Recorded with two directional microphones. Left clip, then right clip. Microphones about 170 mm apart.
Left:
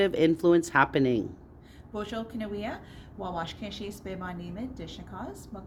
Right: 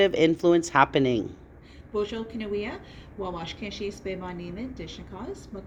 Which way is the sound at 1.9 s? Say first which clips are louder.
Right 5 dB; 25° left (ahead or behind).